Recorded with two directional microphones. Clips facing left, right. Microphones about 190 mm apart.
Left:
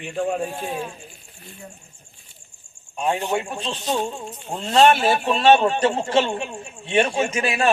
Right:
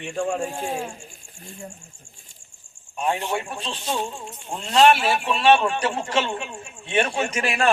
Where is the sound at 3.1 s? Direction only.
15° left (ahead or behind).